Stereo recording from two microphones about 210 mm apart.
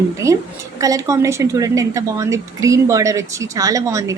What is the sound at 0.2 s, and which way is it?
Speech, 15° right (ahead or behind).